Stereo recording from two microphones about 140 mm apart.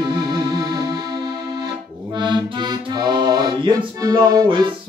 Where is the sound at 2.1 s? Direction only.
30° right (ahead or behind).